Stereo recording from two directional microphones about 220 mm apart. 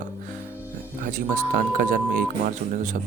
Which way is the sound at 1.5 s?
40° right (ahead or behind).